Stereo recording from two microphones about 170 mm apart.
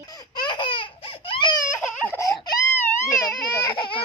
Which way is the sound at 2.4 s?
25° left (ahead or behind).